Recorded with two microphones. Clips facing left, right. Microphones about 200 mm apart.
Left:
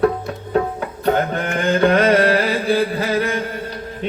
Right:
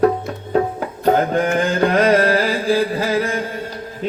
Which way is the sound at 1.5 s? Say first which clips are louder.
Left 1 dB; 35° right (ahead or behind).